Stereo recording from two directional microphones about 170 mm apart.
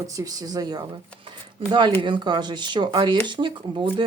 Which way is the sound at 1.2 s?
30° right (ahead or behind).